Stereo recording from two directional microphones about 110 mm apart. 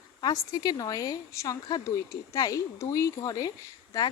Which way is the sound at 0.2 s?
35° left (ahead or behind).